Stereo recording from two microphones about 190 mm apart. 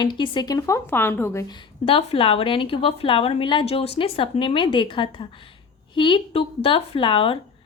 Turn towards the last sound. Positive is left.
turn(degrees=25)  # may be behind; listen again after turning